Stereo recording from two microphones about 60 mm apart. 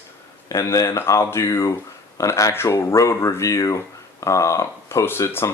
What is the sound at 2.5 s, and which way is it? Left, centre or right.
Speech, left.